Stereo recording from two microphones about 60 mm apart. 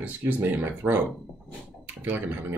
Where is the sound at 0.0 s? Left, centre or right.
Right.